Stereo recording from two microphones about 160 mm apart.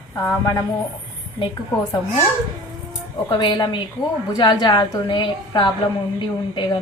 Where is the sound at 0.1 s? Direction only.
15° left (ahead or behind).